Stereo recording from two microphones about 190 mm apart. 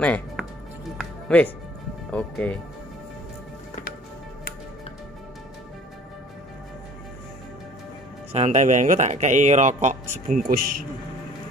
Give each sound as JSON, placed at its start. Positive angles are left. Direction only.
{"t": 0.0, "sound": "music", "side_deg": 5}
{"t": 1.3, "sound": "speech", "side_deg": 5}
{"t": 8.3, "sound": "speech", "side_deg": -35}